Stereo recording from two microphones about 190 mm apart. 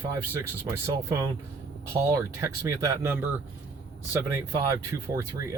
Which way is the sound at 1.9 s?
15° right (ahead or behind).